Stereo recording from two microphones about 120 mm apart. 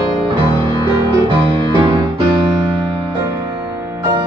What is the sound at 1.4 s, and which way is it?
Music, 40° right (ahead or behind).